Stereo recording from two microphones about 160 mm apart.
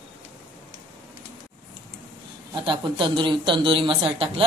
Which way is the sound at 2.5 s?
30° right (ahead or behind).